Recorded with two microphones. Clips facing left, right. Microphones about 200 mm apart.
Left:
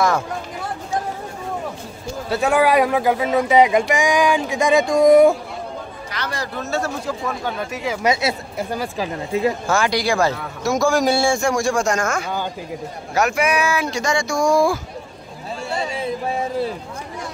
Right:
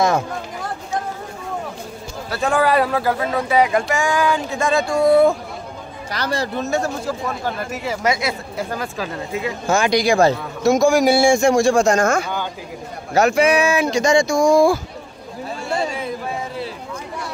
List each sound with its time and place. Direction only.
2.4 s speech: 10° left (ahead or behind)
6.1 s speech: 30° right (ahead or behind); by 7.2 s 15° right (ahead or behind)
7.7 s speech: 5° right (ahead or behind)
8.0 s a woman's voice: 25° left (ahead or behind)
8.7 s speech: 15° left (ahead or behind)
9.7 s speech: 20° right (ahead or behind)
11.0 s speech: 10° right (ahead or behind)